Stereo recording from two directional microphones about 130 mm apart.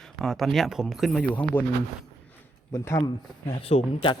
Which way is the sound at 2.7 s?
25° left (ahead or behind).